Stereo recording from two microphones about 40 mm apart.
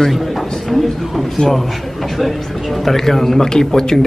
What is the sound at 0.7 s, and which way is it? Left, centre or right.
A man's voice, centre.